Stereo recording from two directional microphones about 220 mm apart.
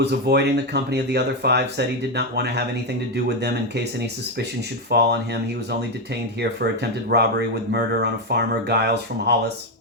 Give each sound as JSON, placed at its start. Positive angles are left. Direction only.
{"t": 0.0, "sound": "speech", "side_deg": -50}
{"t": 4.9, "sound": "speech", "side_deg": -50}
{"t": 7.1, "sound": "speech", "side_deg": -50}